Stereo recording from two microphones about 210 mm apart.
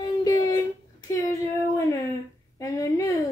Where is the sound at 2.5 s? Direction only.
15° left (ahead or behind).